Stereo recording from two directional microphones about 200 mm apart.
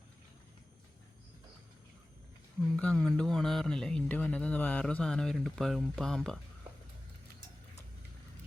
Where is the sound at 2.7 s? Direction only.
5° left (ahead or behind).